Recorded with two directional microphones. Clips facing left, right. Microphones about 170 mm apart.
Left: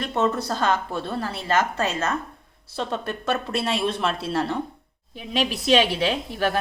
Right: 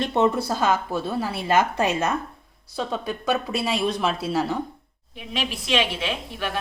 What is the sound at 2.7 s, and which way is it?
Speech, centre (ahead or behind).